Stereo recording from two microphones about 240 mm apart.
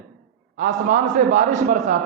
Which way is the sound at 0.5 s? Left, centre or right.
Right.